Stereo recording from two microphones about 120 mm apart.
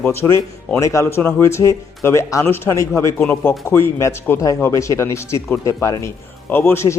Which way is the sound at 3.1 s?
10° left (ahead or behind).